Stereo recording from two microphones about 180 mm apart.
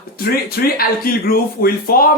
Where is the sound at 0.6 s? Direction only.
55° left (ahead or behind).